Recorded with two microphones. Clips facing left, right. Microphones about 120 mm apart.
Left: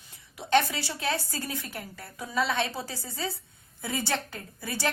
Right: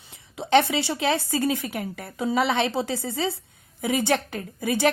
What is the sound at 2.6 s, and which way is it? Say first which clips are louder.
Speech: right 6 dB; 25° right (ahead or behind).